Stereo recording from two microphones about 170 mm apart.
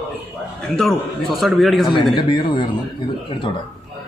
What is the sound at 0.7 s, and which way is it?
A man's voice, centre (ahead or behind).